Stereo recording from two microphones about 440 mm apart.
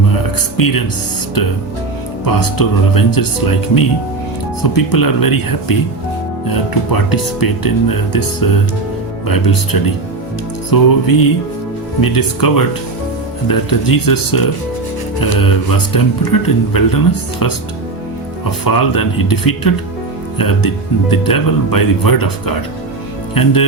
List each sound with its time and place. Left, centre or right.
0.1 s music: left
2.2 s speech: left
18.6 s speech: left